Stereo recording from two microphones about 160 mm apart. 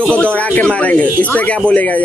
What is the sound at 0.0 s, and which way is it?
A man's voice, 5° left (ahead or behind).